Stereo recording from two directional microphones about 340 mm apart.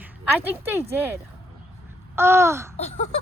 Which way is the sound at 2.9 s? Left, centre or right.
Centre.